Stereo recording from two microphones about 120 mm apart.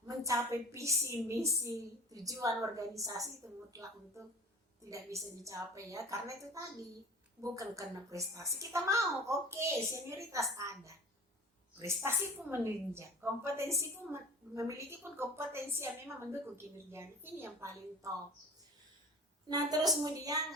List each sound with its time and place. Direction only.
0.2 s a woman's voice: 25° right (ahead or behind)
12.0 s a woman's voice: 20° right (ahead or behind)
19.5 s a woman's voice: 30° right (ahead or behind)